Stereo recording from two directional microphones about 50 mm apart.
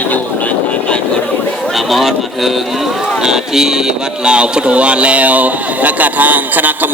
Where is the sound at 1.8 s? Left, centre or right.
Centre.